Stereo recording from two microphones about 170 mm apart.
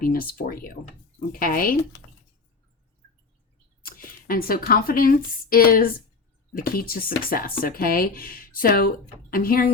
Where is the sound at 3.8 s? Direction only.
60° left (ahead or behind).